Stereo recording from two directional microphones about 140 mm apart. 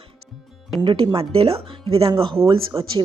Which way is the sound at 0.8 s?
40° right (ahead or behind).